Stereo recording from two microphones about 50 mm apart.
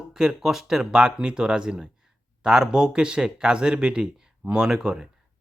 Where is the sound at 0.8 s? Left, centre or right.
Centre.